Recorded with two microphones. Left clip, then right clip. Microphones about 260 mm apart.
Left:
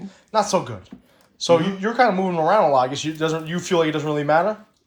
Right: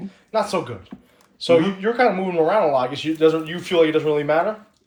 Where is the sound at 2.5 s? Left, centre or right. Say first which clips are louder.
Left 4 dB; centre.